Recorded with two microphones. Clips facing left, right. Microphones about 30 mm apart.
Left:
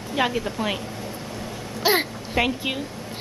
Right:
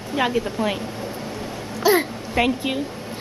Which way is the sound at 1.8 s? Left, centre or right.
Left.